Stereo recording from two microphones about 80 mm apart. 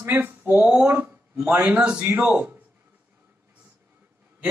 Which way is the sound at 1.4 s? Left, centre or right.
Right.